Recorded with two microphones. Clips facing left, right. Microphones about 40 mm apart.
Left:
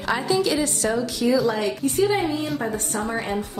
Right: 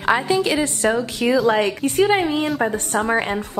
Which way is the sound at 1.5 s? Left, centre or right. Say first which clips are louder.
Right 5 dB; right.